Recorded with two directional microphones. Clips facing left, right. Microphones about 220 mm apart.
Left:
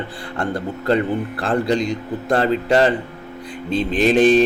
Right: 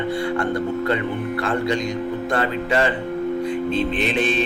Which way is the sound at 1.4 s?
35° left (ahead or behind).